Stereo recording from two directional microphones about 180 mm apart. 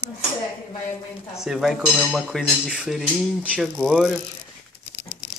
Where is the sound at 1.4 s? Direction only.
Centre (ahead or behind).